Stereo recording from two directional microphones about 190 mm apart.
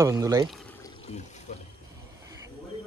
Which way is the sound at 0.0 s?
20° right (ahead or behind).